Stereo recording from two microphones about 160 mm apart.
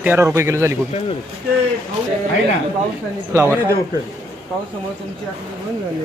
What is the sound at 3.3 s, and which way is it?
Speech, 15° right (ahead or behind).